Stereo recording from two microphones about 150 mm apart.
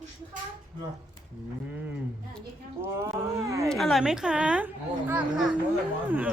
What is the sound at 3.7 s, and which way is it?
A woman's voice, centre (ahead or behind).